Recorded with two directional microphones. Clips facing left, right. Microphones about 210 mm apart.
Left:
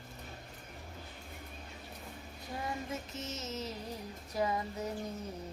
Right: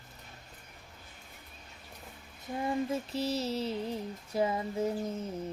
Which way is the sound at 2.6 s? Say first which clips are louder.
Right 9 dB; 30° right (ahead or behind).